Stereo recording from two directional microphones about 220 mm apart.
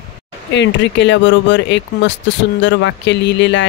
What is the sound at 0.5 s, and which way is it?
Speech, 55° left (ahead or behind).